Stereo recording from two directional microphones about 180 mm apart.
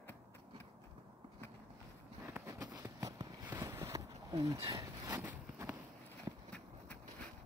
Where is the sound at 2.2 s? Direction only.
15° right (ahead or behind).